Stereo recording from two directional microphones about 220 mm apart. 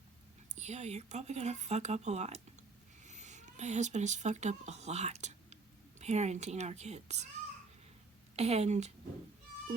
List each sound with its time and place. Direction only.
0.5 s speech: 30° right (ahead or behind)
8.4 s a woman's voice: 30° right (ahead or behind)